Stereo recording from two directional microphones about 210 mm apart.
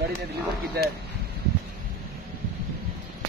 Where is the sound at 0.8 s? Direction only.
45° right (ahead or behind).